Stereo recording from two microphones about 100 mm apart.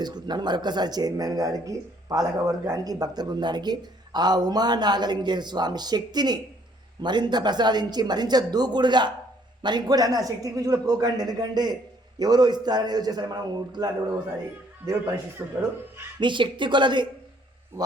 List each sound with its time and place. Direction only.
0.0 s a man's voice: 45° right (ahead or behind)
15.4 s speech: 20° right (ahead or behind)
16.2 s speech: 55° right (ahead or behind)